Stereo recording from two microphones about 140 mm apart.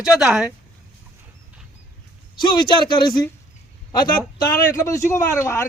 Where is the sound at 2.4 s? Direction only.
35° left (ahead or behind).